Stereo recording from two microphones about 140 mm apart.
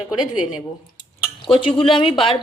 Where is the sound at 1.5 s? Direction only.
40° left (ahead or behind).